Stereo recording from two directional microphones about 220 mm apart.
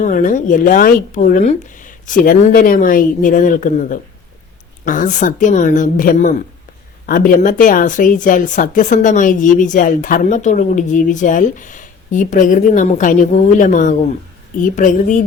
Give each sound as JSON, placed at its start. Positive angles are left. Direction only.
{"t": 0.0, "sound": "speech", "side_deg": 35}